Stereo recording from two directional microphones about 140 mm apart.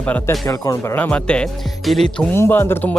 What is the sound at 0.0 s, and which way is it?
Speech, 10° left (ahead or behind).